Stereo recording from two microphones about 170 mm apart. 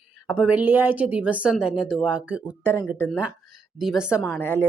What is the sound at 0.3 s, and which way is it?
A woman's voice, 5° right (ahead or behind).